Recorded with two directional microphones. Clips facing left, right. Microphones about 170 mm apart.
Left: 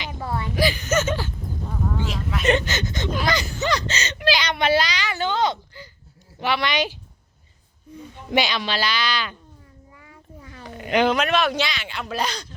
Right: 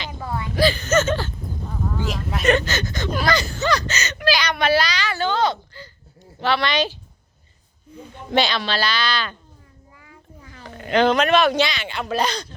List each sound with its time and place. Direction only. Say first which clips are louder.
0.5 s speech: right 4 dB; 15° left (ahead or behind)
2.4 s speech: right 2 dB; 20° left (ahead or behind)
8.3 s speech: right 2 dB; 15° left (ahead or behind)
10.1 s a sound: left 2 dB; 25° left (ahead or behind)
10.9 s speech: right 3 dB; 10° left (ahead or behind)